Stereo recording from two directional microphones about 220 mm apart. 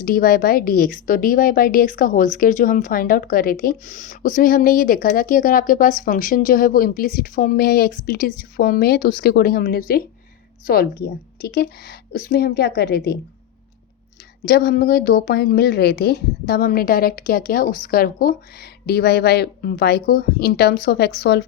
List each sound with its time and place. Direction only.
0.0 s a woman's voice: 40° left (ahead or behind)
14.4 s a woman's voice: 40° left (ahead or behind)